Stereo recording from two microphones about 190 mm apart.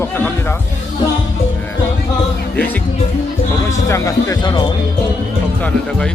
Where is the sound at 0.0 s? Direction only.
10° left (ahead or behind).